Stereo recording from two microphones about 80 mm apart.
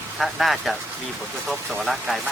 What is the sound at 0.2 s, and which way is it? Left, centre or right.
Speech, centre.